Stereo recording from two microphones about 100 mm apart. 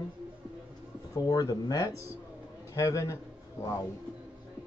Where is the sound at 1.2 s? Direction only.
40° left (ahead or behind).